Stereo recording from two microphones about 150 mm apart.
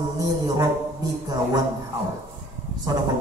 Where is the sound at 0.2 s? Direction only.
25° right (ahead or behind).